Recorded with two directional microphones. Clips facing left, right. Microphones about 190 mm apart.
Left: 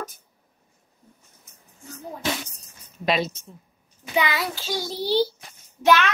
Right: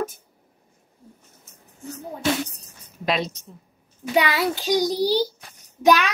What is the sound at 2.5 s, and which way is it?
Speech, centre (ahead or behind).